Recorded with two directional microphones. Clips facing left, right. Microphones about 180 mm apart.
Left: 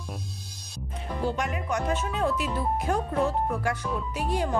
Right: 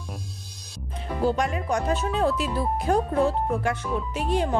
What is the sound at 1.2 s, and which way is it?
Speech, 35° right (ahead or behind).